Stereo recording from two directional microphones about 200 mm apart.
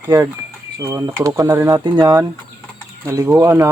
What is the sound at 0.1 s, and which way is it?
Speech, 15° right (ahead or behind).